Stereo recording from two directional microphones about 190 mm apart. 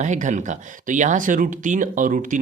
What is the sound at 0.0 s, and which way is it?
Speech, 40° right (ahead or behind).